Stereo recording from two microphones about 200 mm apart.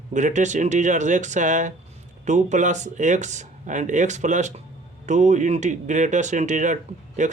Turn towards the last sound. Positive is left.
turn(degrees=-35)  # may be behind; listen again after turning